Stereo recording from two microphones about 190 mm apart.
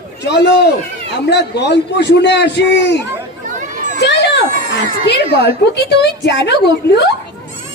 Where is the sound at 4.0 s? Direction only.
65° left (ahead or behind).